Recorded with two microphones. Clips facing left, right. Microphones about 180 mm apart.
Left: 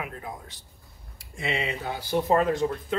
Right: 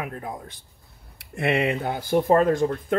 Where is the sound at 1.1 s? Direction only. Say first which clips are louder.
Right 7 dB; 60° right (ahead or behind).